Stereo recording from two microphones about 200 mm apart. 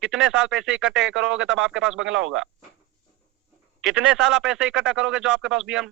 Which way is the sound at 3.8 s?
5° right (ahead or behind).